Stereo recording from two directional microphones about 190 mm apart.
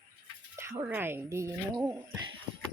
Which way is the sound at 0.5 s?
15° right (ahead or behind).